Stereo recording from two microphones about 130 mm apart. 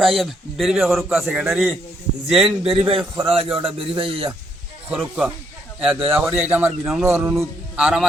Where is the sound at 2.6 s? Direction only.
45° right (ahead or behind).